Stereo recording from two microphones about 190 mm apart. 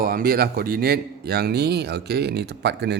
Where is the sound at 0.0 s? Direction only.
50° right (ahead or behind).